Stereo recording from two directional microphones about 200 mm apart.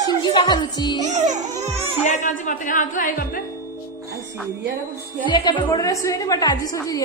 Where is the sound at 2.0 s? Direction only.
35° left (ahead or behind).